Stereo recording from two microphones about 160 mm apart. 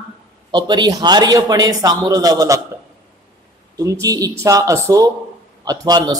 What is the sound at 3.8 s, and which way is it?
A man's voice, 20° right (ahead or behind).